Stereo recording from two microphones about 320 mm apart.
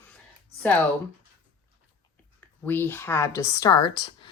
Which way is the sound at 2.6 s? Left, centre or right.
Centre.